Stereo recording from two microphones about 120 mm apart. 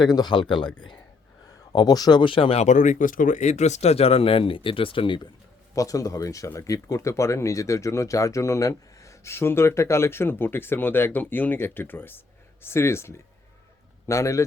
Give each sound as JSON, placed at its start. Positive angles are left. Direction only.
{"t": 0.0, "sound": "speech", "side_deg": 35}
{"t": 5.7, "sound": "speech", "side_deg": 30}